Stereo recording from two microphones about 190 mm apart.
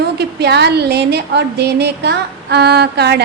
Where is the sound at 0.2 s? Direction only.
60° right (ahead or behind).